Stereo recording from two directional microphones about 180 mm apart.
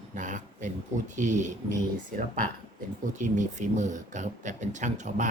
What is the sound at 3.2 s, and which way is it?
Speech, 45° right (ahead or behind).